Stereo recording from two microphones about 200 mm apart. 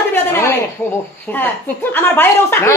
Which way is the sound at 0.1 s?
10° left (ahead or behind).